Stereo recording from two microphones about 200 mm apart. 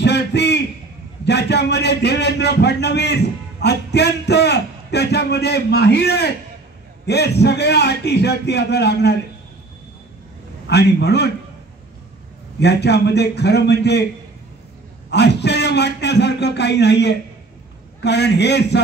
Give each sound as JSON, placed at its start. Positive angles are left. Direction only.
{"t": 0.0, "sound": "a sound", "side_deg": 60}
{"t": 1.2, "sound": "a man's voice", "side_deg": 60}
{"t": 10.7, "sound": "a man's voice", "side_deg": 55}
{"t": 12.5, "sound": "a man's voice", "side_deg": 55}
{"t": 15.0, "sound": "a man's voice", "side_deg": 60}